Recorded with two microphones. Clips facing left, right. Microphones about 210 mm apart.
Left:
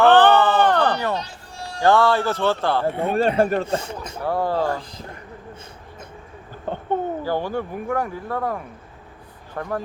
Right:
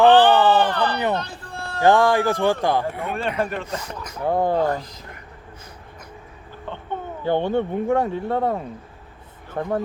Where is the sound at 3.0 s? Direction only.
35° left (ahead or behind).